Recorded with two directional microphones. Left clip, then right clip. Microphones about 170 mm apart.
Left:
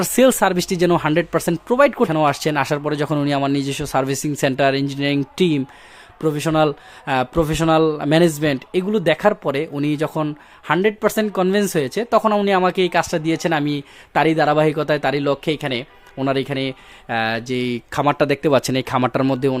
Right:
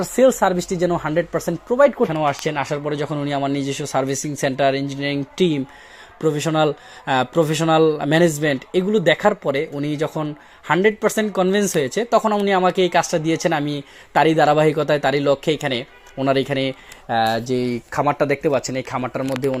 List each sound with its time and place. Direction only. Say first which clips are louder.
0.0 s a man's voice: even; 40° left (ahead or behind); by 17.7 s 5° left (ahead or behind)
18.0 s speech: left 1 dB; 50° left (ahead or behind)